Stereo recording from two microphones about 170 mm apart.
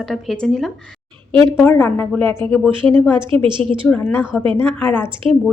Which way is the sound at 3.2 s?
30° right (ahead or behind).